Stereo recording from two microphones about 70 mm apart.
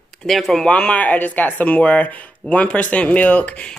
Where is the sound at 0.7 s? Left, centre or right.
Centre.